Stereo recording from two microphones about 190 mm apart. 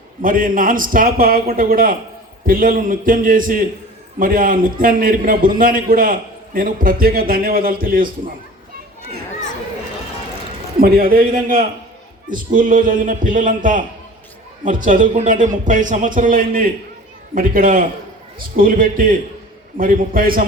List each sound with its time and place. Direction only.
0.2 s a man's voice: 45° right (ahead or behind)
10.8 s a man's voice: 50° right (ahead or behind)